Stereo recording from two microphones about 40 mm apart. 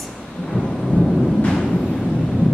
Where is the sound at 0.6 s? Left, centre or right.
Centre.